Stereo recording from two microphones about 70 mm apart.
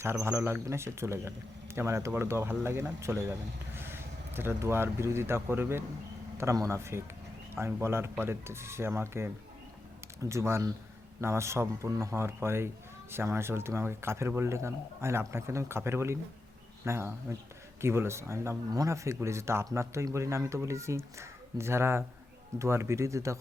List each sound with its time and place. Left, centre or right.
0.0 s speech: right
18.7 s speech: right